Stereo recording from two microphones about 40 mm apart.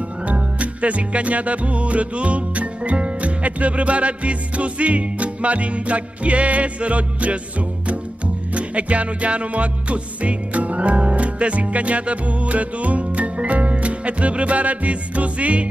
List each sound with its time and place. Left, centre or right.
0.3 s music: right
8.5 s music: right